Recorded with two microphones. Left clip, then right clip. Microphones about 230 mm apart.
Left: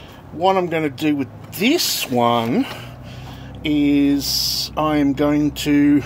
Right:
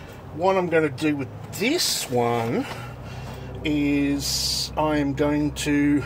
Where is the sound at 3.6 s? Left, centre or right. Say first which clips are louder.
Left 6 dB; left.